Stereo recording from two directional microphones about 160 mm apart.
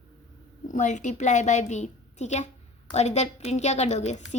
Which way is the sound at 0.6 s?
50° left (ahead or behind).